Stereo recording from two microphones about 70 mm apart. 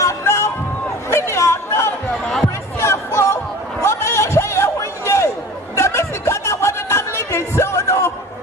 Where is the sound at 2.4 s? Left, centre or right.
Left.